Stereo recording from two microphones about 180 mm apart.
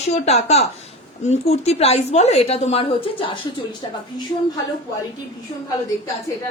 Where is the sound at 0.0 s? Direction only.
40° left (ahead or behind).